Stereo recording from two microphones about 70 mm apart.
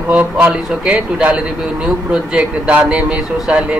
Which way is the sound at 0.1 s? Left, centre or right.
Right.